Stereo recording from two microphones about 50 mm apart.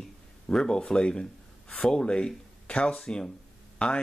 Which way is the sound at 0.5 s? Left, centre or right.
Centre.